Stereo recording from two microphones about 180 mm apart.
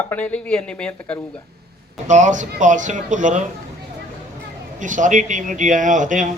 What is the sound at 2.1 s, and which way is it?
A man's voice, 40° right (ahead or behind).